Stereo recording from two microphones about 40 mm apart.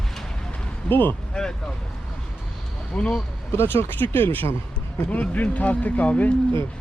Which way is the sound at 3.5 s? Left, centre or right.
Left.